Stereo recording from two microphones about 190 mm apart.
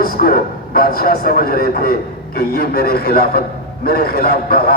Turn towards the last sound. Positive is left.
turn(degrees=55)  # may be behind; listen again after turning